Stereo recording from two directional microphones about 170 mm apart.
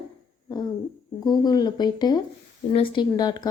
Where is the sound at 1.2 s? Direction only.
25° left (ahead or behind).